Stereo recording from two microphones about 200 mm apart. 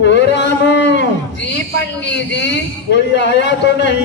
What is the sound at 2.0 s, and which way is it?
A man's voice, 60° left (ahead or behind).